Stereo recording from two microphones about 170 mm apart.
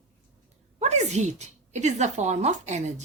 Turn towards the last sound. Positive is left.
turn(degrees=-45)  # may be behind; listen again after turning